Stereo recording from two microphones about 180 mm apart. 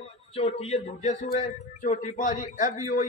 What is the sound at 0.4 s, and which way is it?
A man's voice, 35° left (ahead or behind).